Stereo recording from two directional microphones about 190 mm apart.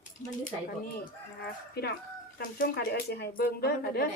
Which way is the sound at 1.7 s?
55° left (ahead or behind).